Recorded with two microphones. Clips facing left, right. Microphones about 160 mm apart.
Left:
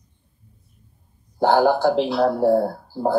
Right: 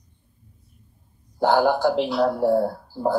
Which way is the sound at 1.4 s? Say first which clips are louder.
Left 2 dB; 35° left (ahead or behind).